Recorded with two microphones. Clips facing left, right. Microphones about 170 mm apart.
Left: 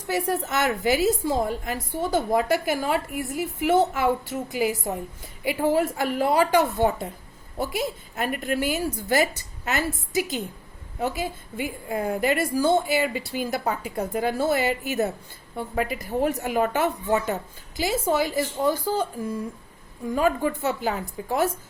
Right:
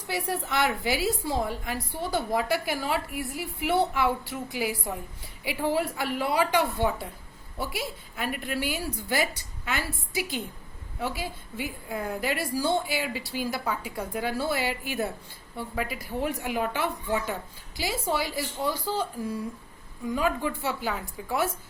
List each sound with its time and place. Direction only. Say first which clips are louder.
0.1 s a woman's voice: left 5 dB; 45° left (ahead or behind)
20.1 s a woman's voice: left 5 dB; 45° left (ahead or behind)